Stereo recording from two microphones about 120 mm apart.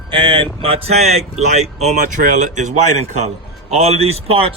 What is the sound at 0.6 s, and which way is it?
Speech, 55° right (ahead or behind).